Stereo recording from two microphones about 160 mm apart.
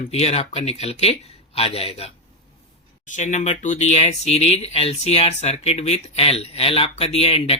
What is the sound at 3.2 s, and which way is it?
Speech, 50° left (ahead or behind).